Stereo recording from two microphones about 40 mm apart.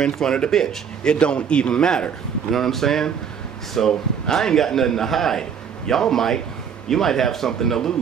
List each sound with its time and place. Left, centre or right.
0.0 s a man's voice: centre
1.1 s a man's voice: left
2.5 s a man's voice: centre